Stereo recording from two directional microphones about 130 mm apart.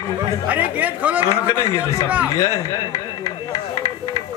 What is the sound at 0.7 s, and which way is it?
Speech, 10° right (ahead or behind).